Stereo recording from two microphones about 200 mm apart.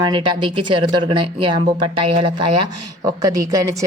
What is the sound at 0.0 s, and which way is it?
A woman's voice, 25° right (ahead or behind).